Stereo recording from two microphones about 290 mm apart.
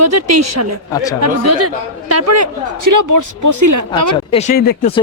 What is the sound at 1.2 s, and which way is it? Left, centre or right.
A woman's voice, right.